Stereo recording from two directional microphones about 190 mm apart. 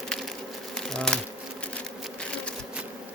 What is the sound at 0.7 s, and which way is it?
Bee, 5° left (ahead or behind).